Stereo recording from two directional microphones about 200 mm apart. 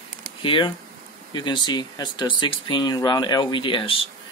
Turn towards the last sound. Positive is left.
turn(degrees=25)  # may be behind; listen again after turning